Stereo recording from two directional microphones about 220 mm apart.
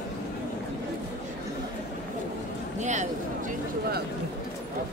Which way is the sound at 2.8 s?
35° right (ahead or behind).